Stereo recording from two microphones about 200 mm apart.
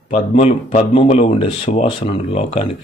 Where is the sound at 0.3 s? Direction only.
35° left (ahead or behind).